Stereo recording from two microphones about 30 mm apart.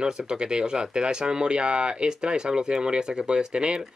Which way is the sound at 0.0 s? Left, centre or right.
Right.